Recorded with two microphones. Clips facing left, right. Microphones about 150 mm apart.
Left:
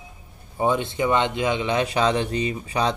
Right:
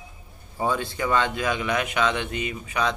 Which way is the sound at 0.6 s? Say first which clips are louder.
Left 4 dB; 20° left (ahead or behind).